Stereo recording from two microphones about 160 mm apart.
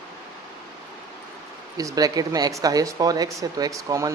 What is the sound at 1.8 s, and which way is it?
Speech, 20° right (ahead or behind).